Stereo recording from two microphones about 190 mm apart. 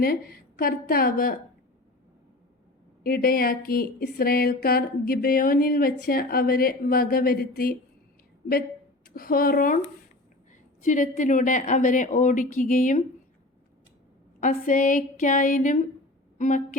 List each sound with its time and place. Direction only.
0.0 s speech: 50° left (ahead or behind)
3.0 s speech: 50° left (ahead or behind)
9.0 s speech: 50° left (ahead or behind)
14.4 s a woman's voice: 45° left (ahead or behind)